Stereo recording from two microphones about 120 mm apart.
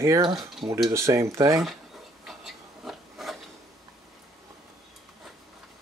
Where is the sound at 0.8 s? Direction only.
25° right (ahead or behind).